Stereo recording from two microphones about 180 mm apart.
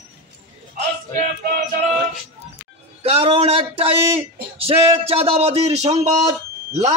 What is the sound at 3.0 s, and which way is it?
Speech, 35° right (ahead or behind).